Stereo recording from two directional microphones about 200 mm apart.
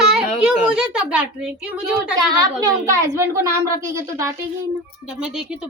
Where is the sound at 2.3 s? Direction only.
20° right (ahead or behind).